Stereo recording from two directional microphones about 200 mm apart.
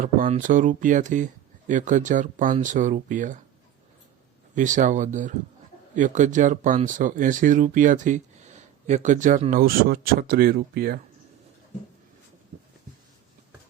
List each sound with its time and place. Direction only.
0.3 s speech: 40° right (ahead or behind)
4.5 s speech: 40° right (ahead or behind)